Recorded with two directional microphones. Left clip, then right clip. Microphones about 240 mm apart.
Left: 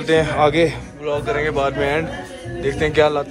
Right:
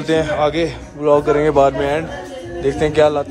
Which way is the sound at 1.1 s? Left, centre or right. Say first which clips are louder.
Right 7 dB; right.